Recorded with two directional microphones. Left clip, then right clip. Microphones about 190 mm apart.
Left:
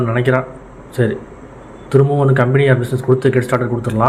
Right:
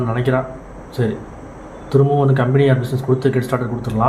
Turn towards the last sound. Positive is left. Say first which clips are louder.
# left 4 dB
turn(degrees=20)  # may be behind; listen again after turning